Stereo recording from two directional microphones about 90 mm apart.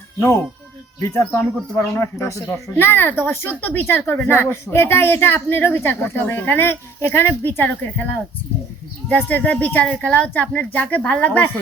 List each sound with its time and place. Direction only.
1.0 s speech: 30° left (ahead or behind)
9.0 s speech: 20° left (ahead or behind)